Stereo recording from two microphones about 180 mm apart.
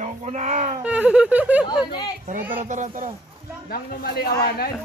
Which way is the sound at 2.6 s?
45° right (ahead or behind).